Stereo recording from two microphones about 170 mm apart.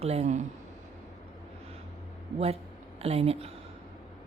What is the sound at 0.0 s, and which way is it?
Speech, 40° right (ahead or behind).